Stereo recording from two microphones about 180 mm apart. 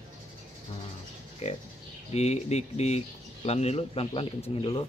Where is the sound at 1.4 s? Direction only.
35° left (ahead or behind).